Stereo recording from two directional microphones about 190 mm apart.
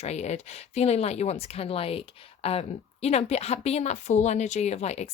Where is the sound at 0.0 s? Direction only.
35° left (ahead or behind).